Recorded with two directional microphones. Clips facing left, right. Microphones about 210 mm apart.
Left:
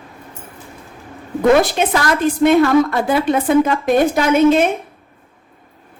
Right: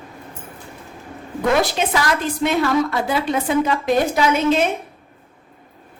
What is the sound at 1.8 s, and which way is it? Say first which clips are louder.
A woman's voice: left 4 dB; 55° left (ahead or behind).